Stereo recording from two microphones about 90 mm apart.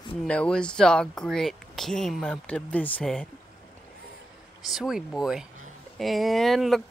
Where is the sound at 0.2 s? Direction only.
10° left (ahead or behind).